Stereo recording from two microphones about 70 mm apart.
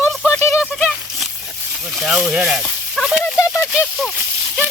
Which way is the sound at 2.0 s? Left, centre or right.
Centre.